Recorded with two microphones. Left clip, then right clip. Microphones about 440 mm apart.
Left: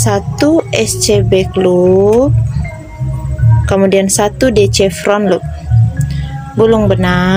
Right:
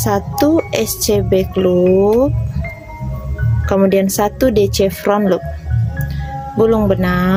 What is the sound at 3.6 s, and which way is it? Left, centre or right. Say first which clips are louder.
A child's voice: left 3 dB; right.